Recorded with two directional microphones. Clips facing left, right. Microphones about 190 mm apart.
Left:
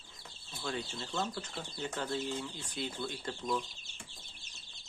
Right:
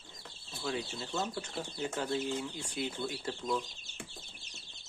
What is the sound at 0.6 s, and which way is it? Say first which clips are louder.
Speech: right 2 dB; 5° right (ahead or behind).